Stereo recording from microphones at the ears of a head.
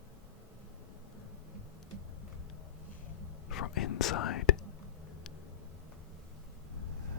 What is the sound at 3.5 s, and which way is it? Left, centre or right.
Whispering, left.